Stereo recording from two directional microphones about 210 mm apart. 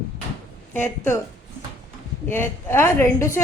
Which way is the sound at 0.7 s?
10° left (ahead or behind).